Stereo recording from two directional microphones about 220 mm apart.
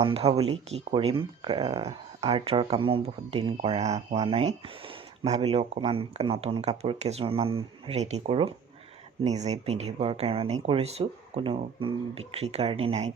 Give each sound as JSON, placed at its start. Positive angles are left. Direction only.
{"t": 0.0, "sound": "speech", "side_deg": -25}